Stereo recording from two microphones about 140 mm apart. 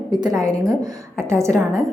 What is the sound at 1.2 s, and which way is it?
Speech, 20° right (ahead or behind).